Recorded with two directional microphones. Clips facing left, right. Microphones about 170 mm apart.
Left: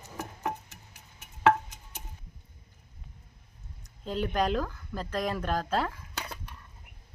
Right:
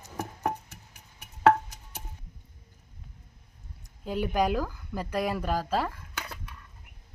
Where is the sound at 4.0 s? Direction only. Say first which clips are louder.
Right 2 dB; 10° right (ahead or behind).